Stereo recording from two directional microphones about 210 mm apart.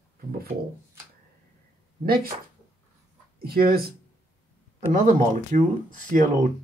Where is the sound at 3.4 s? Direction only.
45° right (ahead or behind).